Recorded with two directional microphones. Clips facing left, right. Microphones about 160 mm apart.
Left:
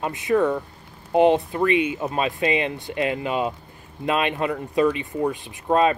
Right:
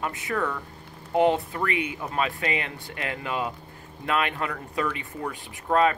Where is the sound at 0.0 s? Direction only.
20° left (ahead or behind).